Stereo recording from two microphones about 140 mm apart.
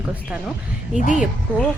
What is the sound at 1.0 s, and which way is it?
Speech, 60° left (ahead or behind).